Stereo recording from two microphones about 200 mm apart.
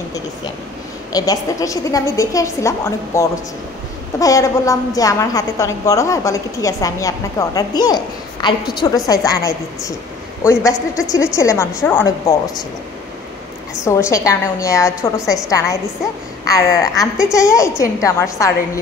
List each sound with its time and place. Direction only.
1.1 s a woman's voice: 20° left (ahead or behind)
13.8 s a woman's voice: 15° left (ahead or behind)
16.9 s a woman's voice: 15° left (ahead or behind)